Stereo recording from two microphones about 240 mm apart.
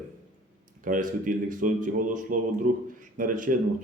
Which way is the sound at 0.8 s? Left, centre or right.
Right.